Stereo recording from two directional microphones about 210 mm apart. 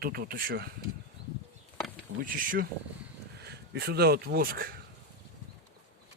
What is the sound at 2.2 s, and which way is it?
Speech, 40° right (ahead or behind).